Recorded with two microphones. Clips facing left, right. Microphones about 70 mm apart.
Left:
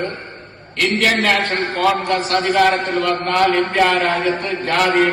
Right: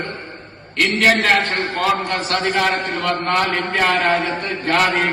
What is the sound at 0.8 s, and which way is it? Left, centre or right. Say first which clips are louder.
Speech: right 1 dB; right.